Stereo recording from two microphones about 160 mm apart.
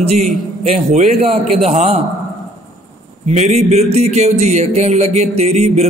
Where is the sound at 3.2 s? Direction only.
45° right (ahead or behind).